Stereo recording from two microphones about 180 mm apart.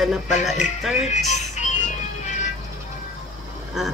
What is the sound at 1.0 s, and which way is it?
Music, 40° left (ahead or behind).